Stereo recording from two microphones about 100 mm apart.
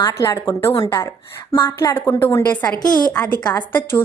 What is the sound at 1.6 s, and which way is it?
Speech, 25° left (ahead or behind).